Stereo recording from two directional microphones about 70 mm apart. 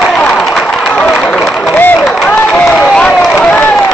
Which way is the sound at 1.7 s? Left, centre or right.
Left.